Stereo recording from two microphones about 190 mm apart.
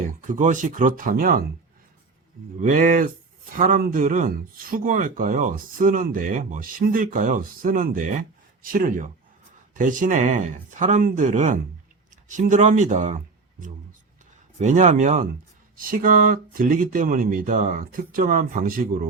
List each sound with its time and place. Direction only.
0.0 s speech: 40° right (ahead or behind)
2.6 s speech: 40° right (ahead or behind)